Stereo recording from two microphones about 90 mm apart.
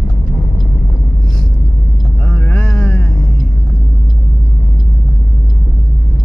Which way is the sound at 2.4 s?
20° left (ahead or behind).